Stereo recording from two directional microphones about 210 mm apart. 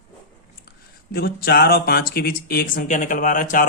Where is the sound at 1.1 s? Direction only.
50° left (ahead or behind).